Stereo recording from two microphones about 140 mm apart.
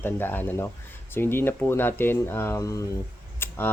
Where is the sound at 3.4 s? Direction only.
15° left (ahead or behind).